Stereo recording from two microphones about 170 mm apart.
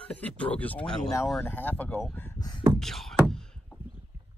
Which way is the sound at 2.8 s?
Centre (ahead or behind).